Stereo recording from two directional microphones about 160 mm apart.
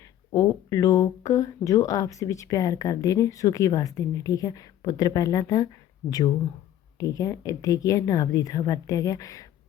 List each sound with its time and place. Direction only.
0.3 s speech: 20° left (ahead or behind)